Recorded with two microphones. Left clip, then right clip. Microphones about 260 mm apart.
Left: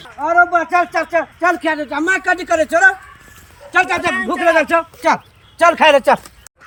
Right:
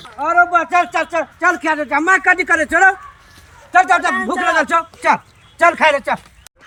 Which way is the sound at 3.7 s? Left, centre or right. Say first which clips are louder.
Right 3 dB; centre.